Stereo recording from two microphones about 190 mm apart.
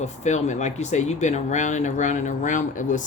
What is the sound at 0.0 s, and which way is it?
Speech, 35° left (ahead or behind).